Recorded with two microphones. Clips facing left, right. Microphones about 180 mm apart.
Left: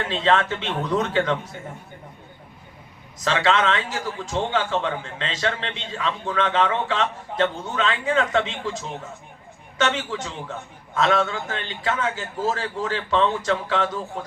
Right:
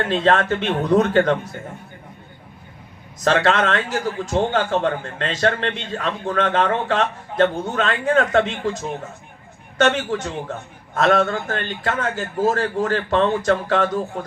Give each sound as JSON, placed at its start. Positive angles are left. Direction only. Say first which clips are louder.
{"t": 0.0, "sound": "a man's voice", "louder": "right 3 dB", "side_deg": -55}
{"t": 3.2, "sound": "a man's voice", "louder": "right 3 dB", "side_deg": -55}